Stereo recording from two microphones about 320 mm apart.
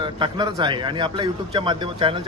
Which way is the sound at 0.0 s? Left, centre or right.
Centre.